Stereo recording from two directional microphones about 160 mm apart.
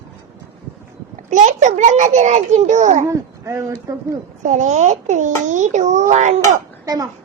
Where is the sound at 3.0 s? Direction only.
20° right (ahead or behind).